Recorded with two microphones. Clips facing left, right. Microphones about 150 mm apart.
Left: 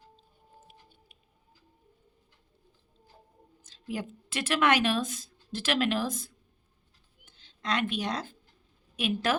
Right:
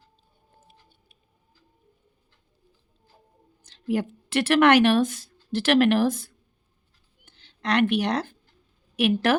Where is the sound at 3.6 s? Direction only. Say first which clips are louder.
Right 10 dB; 65° right (ahead or behind).